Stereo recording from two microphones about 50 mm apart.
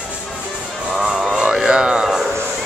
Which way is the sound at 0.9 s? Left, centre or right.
Centre.